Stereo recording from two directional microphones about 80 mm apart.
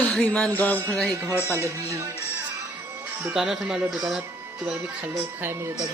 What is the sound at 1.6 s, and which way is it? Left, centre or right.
Speech, right.